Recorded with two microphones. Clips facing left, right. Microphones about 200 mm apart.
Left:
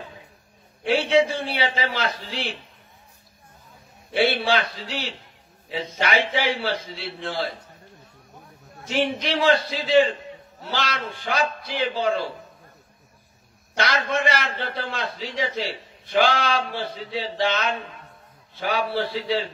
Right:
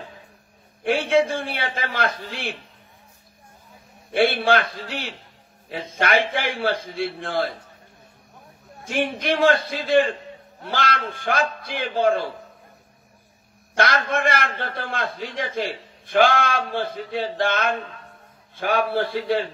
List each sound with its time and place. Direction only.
0.8 s a man's voice: 55° right (ahead or behind)
4.1 s a man's voice: 55° right (ahead or behind)
8.8 s a man's voice: 55° right (ahead or behind)
13.7 s a man's voice: 50° right (ahead or behind)